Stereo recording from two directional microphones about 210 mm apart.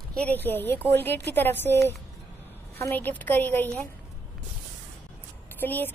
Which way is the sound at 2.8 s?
10° left (ahead or behind).